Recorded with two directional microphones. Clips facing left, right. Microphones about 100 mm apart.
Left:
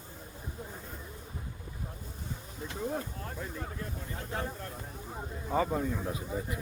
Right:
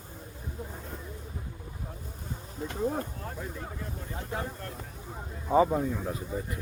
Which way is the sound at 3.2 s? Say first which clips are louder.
Right 1 dB; 5° right (ahead or behind).